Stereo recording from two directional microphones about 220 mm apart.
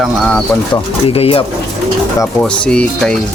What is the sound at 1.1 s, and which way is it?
Speech, 25° left (ahead or behind).